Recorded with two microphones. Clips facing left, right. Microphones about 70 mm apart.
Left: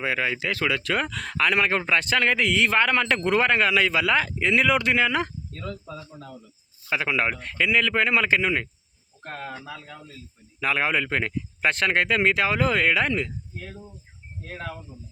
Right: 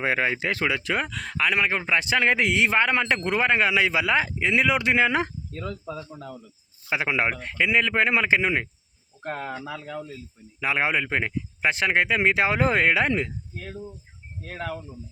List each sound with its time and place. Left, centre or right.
0.0 s speech: right
1.0 s speech: centre; by 5.3 s right
5.9 s speech: centre
6.9 s speech: right
9.2 s speech: centre
10.6 s speech: centre